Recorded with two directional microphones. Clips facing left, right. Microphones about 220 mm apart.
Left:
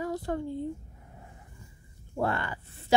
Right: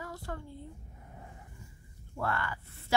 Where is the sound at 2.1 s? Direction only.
20° left (ahead or behind).